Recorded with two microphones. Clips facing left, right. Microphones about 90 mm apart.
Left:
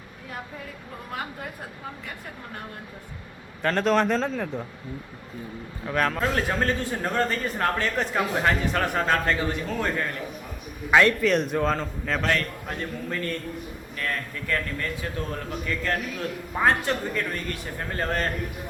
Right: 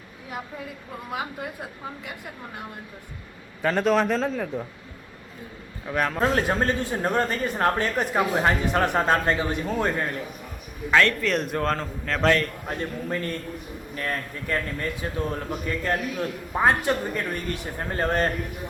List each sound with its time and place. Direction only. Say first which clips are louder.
1.1 s a man's voice: right 3 dB; 10° right (ahead or behind)
3.6 s a man's voice: right 1 dB; 5° right (ahead or behind)
5.9 s a man's voice: left 1 dB; 10° right (ahead or behind)
6.2 s a man's voice: right 2 dB; 25° right (ahead or behind)
10.9 s a man's voice: left 2 dB; 10° left (ahead or behind)
11.3 s a man's voice: left 2 dB; centre (ahead or behind)
12.6 s a man's voice: right 2 dB; 25° right (ahead or behind)